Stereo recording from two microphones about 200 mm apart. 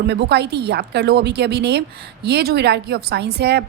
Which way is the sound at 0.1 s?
60° right (ahead or behind).